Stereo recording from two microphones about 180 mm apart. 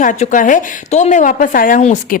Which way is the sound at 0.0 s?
45° left (ahead or behind).